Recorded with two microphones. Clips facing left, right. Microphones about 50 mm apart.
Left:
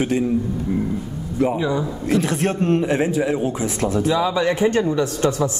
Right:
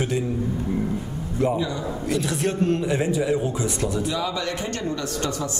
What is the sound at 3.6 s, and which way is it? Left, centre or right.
Speech, left.